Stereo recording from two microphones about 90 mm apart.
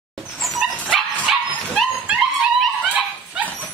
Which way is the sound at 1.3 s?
5° right (ahead or behind).